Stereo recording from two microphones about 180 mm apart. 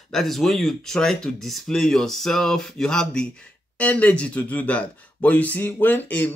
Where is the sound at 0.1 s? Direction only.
Centre (ahead or behind).